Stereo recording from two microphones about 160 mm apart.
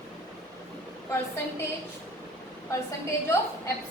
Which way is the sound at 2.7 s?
20° left (ahead or behind).